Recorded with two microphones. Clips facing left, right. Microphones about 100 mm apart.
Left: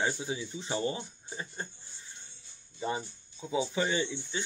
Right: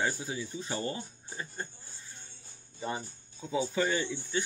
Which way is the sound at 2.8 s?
20° left (ahead or behind).